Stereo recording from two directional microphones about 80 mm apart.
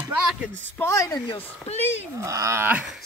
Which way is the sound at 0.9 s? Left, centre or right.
Left.